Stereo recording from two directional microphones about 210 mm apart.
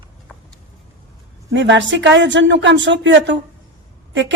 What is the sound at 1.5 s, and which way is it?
A woman's voice, 60° right (ahead or behind).